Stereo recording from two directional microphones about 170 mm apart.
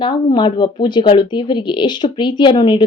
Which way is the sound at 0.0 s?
30° left (ahead or behind).